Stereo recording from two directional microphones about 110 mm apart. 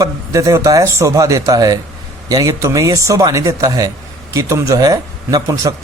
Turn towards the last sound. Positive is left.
turn(degrees=-30)  # may be behind; listen again after turning